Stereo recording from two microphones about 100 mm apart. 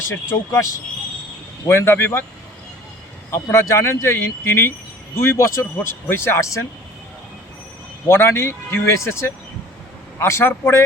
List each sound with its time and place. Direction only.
0.1 s speech: 30° left (ahead or behind)
3.3 s speech: 30° left (ahead or behind)
8.0 s speech: 25° left (ahead or behind)